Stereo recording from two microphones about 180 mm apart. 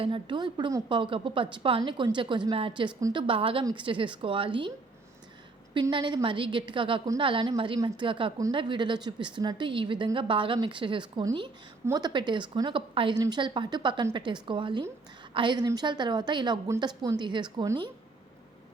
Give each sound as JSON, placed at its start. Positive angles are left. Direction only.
{"t": 0.0, "sound": "a woman's voice", "side_deg": -25}
{"t": 5.7, "sound": "a woman's voice", "side_deg": -25}